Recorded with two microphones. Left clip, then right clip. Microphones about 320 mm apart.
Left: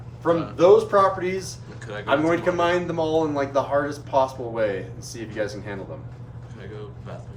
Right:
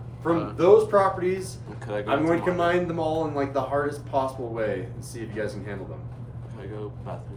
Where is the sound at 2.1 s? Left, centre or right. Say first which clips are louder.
Left 3 dB; left.